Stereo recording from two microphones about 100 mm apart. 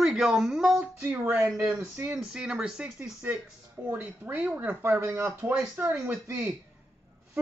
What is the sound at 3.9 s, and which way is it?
Speech, 15° right (ahead or behind).